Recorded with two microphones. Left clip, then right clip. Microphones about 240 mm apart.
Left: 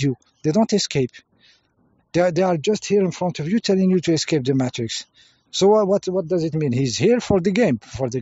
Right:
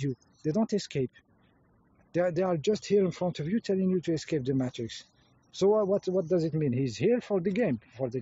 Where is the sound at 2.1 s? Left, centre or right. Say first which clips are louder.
Left 9 dB; left.